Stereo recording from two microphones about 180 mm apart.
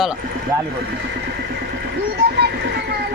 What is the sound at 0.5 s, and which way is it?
Speech, 15° right (ahead or behind).